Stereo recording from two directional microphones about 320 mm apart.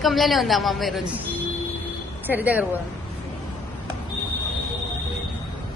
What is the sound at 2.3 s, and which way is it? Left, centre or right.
Speech, centre.